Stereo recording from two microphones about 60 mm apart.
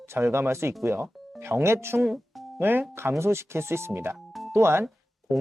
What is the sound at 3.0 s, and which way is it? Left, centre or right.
Speech, right.